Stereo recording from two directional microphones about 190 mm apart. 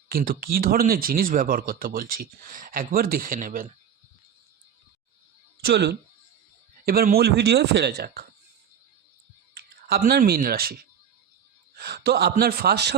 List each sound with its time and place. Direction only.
0.1 s speech: 50° right (ahead or behind)
5.6 s speech: 60° right (ahead or behind)
9.8 s speech: 55° right (ahead or behind)
11.8 s speech: 55° right (ahead or behind)